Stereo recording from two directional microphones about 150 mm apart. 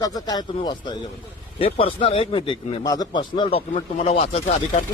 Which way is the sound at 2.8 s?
25° left (ahead or behind).